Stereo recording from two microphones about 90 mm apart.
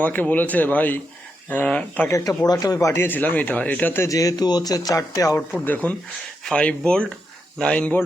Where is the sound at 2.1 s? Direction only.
40° left (ahead or behind); by 4.0 s 20° left (ahead or behind).